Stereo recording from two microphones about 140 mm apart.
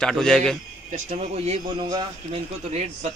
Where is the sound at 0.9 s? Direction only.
50° right (ahead or behind).